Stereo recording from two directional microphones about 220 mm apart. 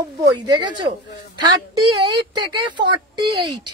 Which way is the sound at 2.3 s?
20° right (ahead or behind).